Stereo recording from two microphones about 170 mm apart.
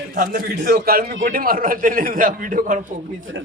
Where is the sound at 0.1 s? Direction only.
55° right (ahead or behind).